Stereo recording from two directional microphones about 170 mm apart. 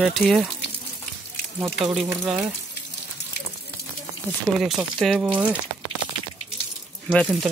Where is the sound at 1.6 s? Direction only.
Centre (ahead or behind).